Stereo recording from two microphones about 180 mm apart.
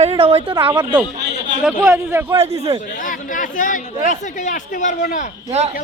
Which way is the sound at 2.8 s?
50° left (ahead or behind).